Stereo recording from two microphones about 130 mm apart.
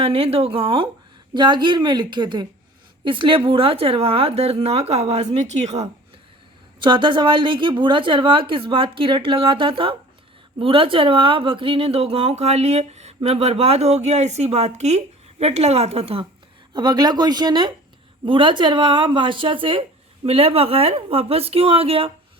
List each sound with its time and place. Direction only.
0.0 s a woman's voice: 50° right (ahead or behind)
6.8 s a woman's voice: 40° right (ahead or behind)
16.7 s a woman's voice: 30° right (ahead or behind); by 22.1 s 50° right (ahead or behind)